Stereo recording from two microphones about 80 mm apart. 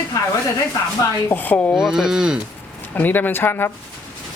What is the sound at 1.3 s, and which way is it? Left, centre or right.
Speech, left.